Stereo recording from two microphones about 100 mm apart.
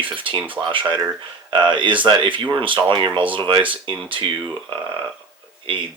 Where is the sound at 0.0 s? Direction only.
60° right (ahead or behind).